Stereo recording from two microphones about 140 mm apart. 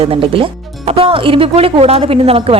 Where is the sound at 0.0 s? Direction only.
40° right (ahead or behind).